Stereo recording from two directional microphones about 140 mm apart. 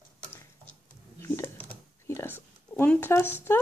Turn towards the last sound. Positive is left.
turn(degrees=15)  # may be behind; listen again after turning